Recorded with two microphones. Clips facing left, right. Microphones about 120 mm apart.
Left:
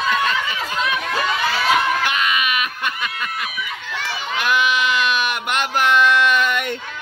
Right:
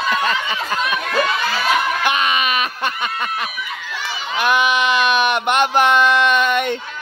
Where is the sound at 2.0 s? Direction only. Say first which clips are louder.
Right 2 dB; 20° right (ahead or behind).